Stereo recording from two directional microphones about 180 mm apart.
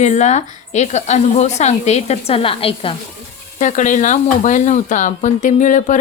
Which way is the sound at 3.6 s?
45° left (ahead or behind).